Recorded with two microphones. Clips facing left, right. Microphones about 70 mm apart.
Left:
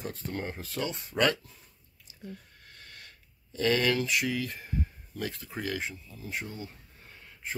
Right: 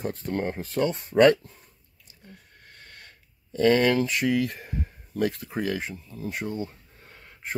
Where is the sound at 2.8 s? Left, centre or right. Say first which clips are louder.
Right 2 dB; right.